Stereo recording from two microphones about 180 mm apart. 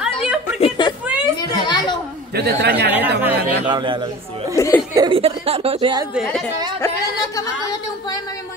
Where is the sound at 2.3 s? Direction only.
65° right (ahead or behind).